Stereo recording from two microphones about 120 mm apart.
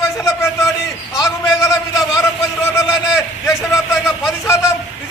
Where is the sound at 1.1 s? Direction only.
25° left (ahead or behind).